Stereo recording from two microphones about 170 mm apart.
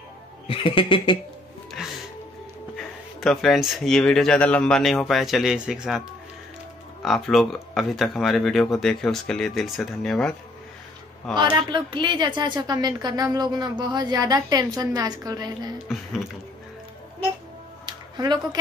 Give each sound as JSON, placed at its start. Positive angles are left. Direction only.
{"t": 0.5, "sound": "a sound", "side_deg": 30}
{"t": 2.7, "sound": "speech", "side_deg": 0}
{"t": 11.3, "sound": "a woman's voice", "side_deg": -25}
{"t": 17.8, "sound": "music", "side_deg": -25}